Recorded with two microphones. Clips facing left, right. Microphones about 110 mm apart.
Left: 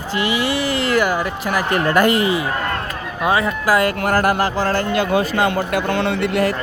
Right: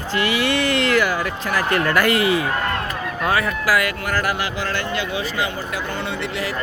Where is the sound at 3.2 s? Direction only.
20° left (ahead or behind).